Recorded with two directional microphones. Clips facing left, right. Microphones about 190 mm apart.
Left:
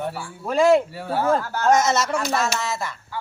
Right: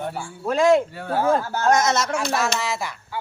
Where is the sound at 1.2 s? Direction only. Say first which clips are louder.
Right 1 dB; 15° right (ahead or behind).